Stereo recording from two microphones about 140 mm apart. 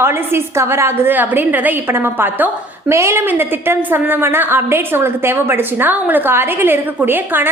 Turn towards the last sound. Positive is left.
turn(degrees=-15)  # may be behind; listen again after turning